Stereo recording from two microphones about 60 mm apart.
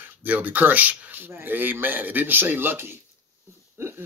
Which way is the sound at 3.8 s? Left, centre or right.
Right.